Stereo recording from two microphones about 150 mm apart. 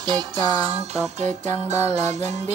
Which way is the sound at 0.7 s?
45° right (ahead or behind).